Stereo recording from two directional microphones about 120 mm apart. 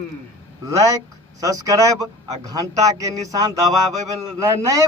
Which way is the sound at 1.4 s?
30° right (ahead or behind).